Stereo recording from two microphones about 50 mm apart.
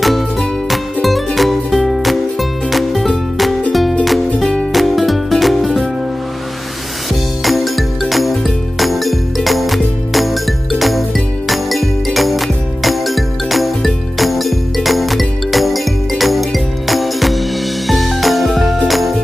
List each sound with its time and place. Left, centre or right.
0.0 s music: centre
7.4 s music: centre